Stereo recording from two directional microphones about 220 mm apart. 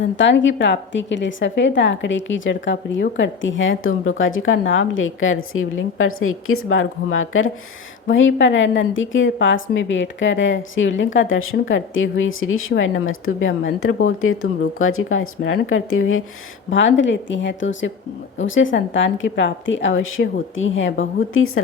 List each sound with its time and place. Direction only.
0.0 s a woman's voice: 55° left (ahead or behind)
16.6 s a woman's voice: 55° left (ahead or behind)